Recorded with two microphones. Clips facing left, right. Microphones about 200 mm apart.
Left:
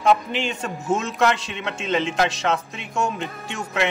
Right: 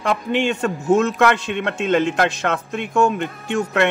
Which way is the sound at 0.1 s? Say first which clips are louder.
Right 4 dB; 60° right (ahead or behind).